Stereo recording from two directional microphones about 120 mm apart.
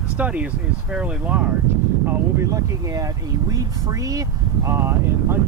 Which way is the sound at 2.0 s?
25° right (ahead or behind).